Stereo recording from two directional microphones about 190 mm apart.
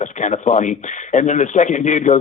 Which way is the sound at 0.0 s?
40° left (ahead or behind).